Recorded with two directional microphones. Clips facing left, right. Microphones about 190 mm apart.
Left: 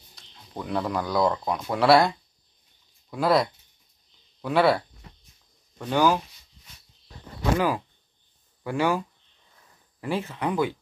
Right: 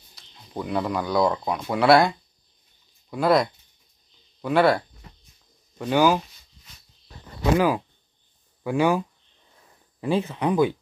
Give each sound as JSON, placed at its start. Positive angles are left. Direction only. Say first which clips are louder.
{"t": 0.1, "sound": "speech", "louder": "right 4 dB", "side_deg": -5}
{"t": 7.5, "sound": "speech", "louder": "right 4 dB", "side_deg": -15}